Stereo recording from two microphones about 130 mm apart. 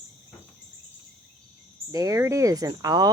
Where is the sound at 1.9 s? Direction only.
25° right (ahead or behind).